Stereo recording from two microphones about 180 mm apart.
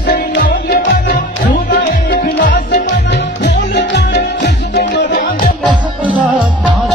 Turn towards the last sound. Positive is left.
turn(degrees=65)  # may be behind; listen again after turning